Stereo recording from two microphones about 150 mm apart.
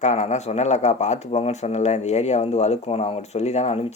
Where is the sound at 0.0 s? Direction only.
50° left (ahead or behind).